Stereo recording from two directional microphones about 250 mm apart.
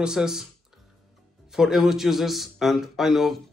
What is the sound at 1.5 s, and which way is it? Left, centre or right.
Speech, centre.